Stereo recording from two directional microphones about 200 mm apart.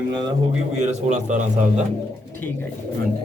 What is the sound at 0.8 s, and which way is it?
Speech, 35° right (ahead or behind).